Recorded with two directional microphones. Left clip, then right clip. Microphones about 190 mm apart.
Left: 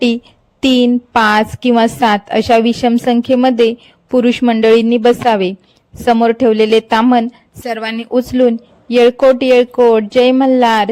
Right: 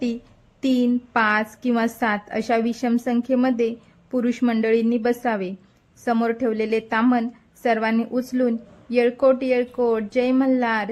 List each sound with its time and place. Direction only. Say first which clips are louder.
0.6 s a woman's voice: left 10 dB; 40° left (ahead or behind)